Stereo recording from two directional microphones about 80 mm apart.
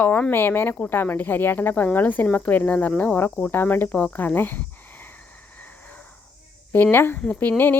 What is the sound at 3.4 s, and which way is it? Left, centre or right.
Cricket, left.